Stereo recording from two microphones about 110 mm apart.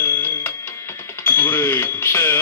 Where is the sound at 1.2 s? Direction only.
20° left (ahead or behind).